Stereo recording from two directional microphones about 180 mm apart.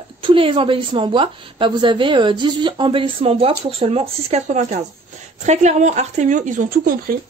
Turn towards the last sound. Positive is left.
turn(degrees=-50)  # may be behind; listen again after turning